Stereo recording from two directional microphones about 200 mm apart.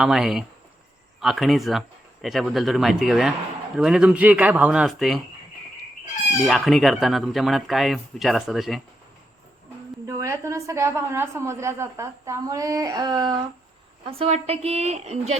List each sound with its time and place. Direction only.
0.0 s speech: centre (ahead or behind)
6.4 s speech: centre (ahead or behind)
10.1 s a woman's voice: 15° right (ahead or behind); by 15.4 s 35° right (ahead or behind)